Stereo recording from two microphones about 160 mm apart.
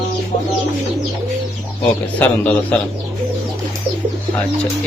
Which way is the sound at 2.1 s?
10° left (ahead or behind).